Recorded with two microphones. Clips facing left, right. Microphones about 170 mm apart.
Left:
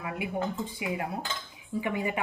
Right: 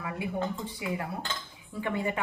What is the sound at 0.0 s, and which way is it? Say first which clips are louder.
A woman's voice: left 1 dB; 15° left (ahead or behind).